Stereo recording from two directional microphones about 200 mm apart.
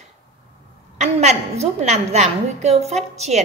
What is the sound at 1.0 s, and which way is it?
A woman's voice, 35° right (ahead or behind).